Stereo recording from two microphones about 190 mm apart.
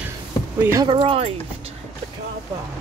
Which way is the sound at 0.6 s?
15° right (ahead or behind).